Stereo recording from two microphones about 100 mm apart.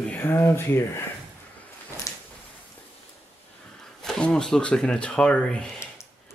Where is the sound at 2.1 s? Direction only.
35° left (ahead or behind).